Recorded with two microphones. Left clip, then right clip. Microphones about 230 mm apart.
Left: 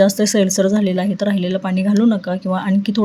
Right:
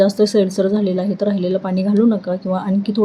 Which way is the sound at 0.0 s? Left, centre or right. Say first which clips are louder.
Right 1 dB; left.